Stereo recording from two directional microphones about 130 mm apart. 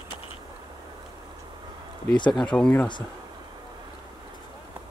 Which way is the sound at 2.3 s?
5° left (ahead or behind).